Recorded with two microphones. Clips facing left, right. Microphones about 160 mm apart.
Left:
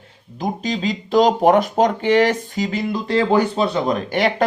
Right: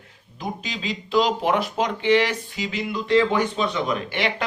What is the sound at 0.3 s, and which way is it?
Speech, 45° left (ahead or behind).